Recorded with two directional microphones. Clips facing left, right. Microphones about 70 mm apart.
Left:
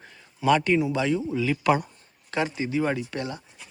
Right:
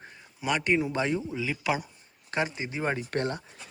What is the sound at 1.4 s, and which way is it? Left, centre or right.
Speech, centre.